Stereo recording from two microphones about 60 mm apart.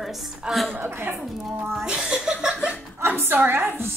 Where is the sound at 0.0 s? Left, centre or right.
Centre.